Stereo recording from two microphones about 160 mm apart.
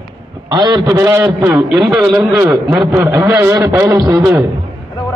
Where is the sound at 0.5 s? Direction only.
30° right (ahead or behind).